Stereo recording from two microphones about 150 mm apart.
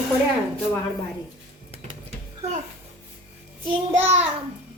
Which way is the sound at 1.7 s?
45° right (ahead or behind).